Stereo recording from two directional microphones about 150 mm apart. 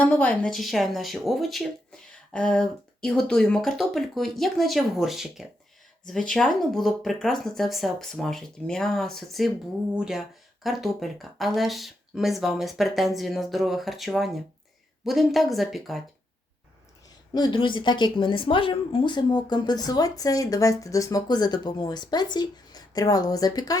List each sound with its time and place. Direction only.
0.0 s a woman's voice: 10° left (ahead or behind)
0.5 s speech: centre (ahead or behind)
17.3 s a woman's voice: 30° left (ahead or behind)